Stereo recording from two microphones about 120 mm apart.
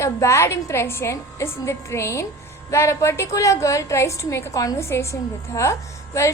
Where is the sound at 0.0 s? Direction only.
25° left (ahead or behind).